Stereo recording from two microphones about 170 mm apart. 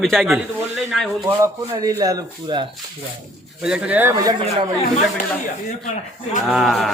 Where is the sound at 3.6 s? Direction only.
5° right (ahead or behind).